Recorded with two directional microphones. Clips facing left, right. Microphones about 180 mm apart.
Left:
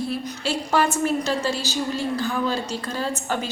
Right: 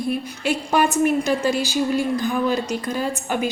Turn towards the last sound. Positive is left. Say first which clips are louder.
# right 3 dB
turn(degrees=-15)  # may be behind; listen again after turning